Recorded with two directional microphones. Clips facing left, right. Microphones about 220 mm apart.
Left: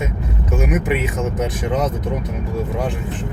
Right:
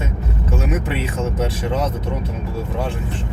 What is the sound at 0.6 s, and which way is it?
Speech, 15° left (ahead or behind).